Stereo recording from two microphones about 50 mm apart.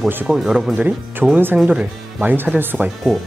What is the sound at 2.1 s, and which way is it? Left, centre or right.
Speech, right.